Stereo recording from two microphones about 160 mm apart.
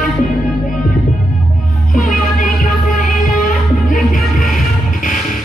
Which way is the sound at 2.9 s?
55° left (ahead or behind).